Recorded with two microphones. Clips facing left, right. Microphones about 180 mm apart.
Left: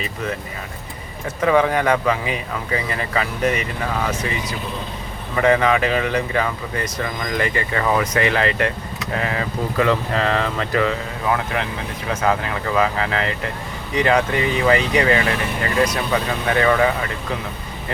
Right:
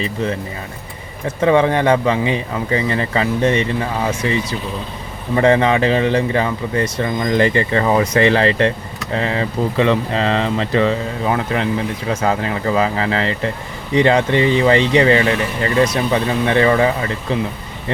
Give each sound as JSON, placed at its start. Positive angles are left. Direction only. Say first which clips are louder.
{"t": 0.0, "sound": "speech", "louder": "right 5 dB", "side_deg": -30}
{"t": 1.4, "sound": "speech", "louder": "right 3 dB", "side_deg": -30}
{"t": 5.4, "sound": "speech", "louder": "right 3 dB", "side_deg": -30}